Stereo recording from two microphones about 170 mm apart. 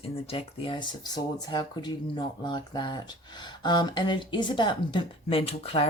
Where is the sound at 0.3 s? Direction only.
30° left (ahead or behind).